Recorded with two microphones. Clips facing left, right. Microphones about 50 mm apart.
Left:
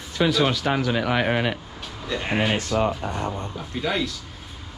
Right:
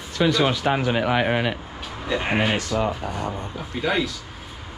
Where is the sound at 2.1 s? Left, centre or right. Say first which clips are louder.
Right 2 dB; centre.